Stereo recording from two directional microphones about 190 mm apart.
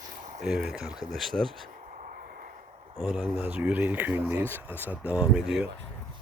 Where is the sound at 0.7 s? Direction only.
Centre (ahead or behind).